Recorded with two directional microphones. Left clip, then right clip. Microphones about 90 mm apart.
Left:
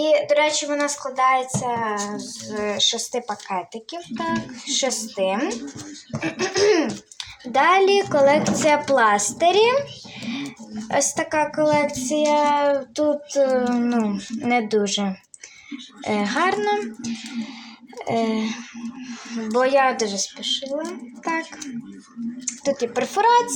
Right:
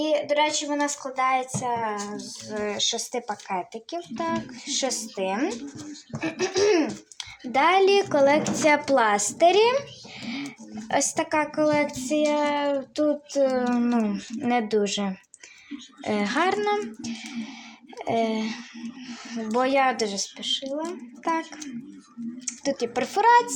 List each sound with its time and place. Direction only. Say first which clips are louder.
0.3 s speech: left 4 dB; 30° right (ahead or behind)
4.6 s a woman's voice: left 6 dB; 45° right (ahead or behind)
22.4 s a woman's voice: left 4 dB; 45° right (ahead or behind)